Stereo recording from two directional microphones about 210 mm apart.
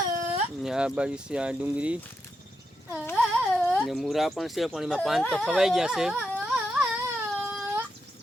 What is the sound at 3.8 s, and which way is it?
Speech, centre (ahead or behind).